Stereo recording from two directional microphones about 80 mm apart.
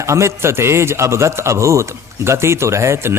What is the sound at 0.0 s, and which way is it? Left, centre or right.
A man's voice, right.